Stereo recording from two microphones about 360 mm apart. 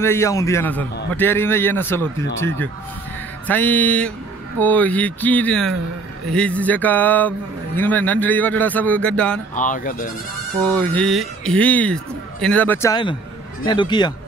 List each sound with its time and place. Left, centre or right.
0.0 s a man's voice: centre
3.4 s speech: centre
9.6 s speech: left
10.6 s a man's voice: centre